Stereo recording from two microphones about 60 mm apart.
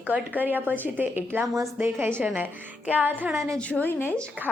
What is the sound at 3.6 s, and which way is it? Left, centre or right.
Speech, left.